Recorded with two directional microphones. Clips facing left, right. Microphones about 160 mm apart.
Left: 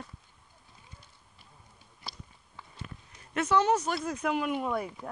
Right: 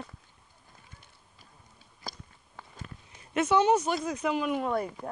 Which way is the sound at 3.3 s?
25° right (ahead or behind).